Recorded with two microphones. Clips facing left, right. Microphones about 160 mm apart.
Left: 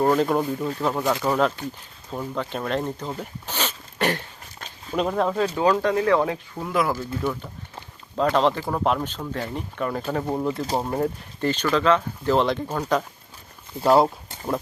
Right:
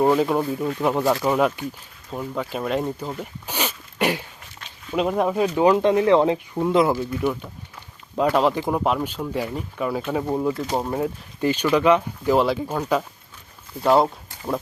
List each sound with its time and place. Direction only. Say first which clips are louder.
0.0 s speech: right 1 dB; 5° right (ahead or behind)
0.8 s speech: right 4 dB; 15° right (ahead or behind)
3.2 s a sound: right 1 dB; 10° right (ahead or behind)
4.9 s speech: right 2 dB; 10° right (ahead or behind)
13.8 s speech: even; centre (ahead or behind)